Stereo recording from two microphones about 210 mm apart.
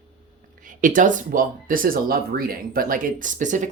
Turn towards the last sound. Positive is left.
turn(degrees=-35)  # may be behind; listen again after turning